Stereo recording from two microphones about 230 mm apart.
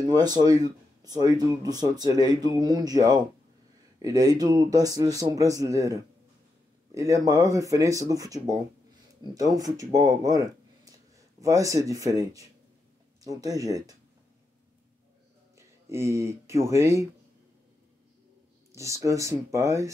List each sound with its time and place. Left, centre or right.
0.0 s speech: centre
15.5 s speech: centre
18.7 s speech: centre